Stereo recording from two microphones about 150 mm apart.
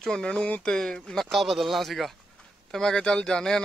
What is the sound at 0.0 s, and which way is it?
A man's voice, 5° left (ahead or behind).